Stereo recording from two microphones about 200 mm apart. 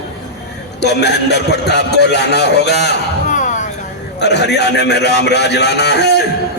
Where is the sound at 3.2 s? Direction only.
40° left (ahead or behind).